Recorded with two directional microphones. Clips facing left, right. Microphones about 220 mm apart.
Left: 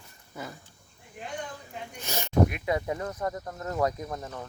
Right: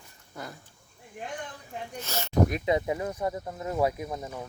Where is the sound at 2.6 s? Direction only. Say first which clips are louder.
Right 2 dB; 20° right (ahead or behind).